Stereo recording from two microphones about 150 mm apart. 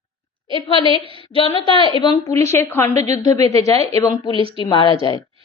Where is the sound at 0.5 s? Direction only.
35° left (ahead or behind).